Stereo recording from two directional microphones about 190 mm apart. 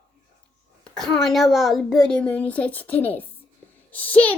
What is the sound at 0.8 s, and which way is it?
A child's voice, 5° left (ahead or behind).